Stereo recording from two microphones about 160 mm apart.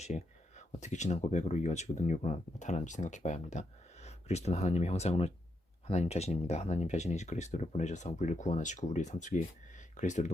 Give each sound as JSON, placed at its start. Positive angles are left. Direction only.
{"t": 0.8, "sound": "speech", "side_deg": 45}